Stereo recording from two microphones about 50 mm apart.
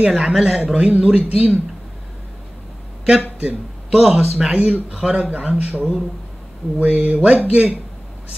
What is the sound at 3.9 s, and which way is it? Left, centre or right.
Speech, centre.